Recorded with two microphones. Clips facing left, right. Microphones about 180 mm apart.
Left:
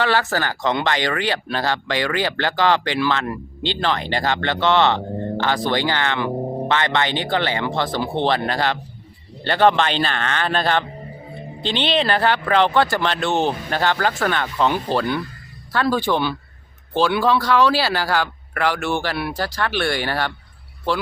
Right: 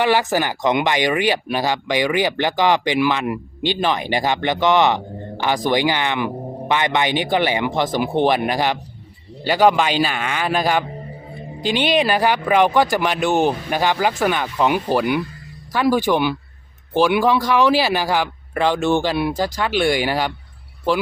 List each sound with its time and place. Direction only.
0.0 s speech: 15° right (ahead or behind)